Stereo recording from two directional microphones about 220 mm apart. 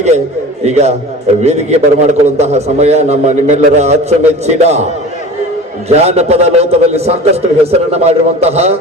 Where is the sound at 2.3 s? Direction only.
30° right (ahead or behind).